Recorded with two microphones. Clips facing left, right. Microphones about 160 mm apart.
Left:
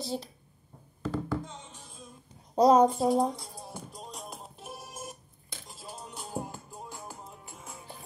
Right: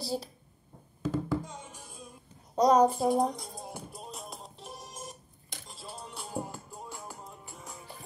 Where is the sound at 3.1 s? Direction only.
15° right (ahead or behind).